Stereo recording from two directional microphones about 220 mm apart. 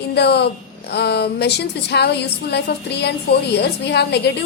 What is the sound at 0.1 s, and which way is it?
A woman's voice, 50° left (ahead or behind).